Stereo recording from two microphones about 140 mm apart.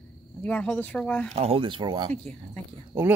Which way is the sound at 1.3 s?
45° right (ahead or behind).